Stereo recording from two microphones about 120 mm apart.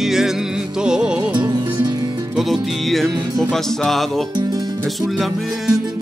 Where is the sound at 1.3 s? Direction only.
35° right (ahead or behind).